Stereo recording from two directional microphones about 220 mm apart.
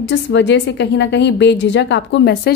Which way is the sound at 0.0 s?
55° left (ahead or behind).